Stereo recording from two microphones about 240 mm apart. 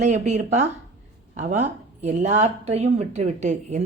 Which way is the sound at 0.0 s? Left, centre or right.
Right.